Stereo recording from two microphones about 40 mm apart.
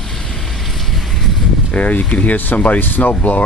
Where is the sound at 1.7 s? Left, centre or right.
Left.